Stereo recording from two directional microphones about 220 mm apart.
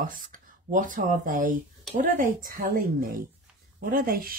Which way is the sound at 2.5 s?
40° right (ahead or behind).